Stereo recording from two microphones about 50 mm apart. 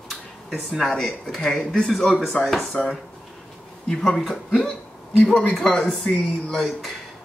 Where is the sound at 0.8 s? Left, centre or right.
Centre.